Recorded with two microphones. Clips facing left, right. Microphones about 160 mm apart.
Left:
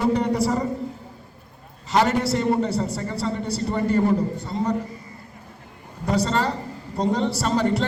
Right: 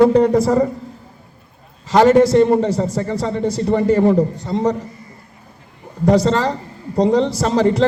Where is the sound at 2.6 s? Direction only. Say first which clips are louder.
Right 6 dB; 40° right (ahead or behind).